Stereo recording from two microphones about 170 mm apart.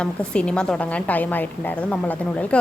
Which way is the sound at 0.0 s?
5° left (ahead or behind).